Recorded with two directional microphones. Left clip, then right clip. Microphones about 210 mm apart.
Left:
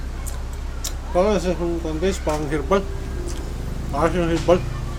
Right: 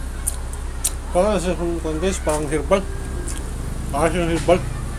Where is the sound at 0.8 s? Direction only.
10° left (ahead or behind).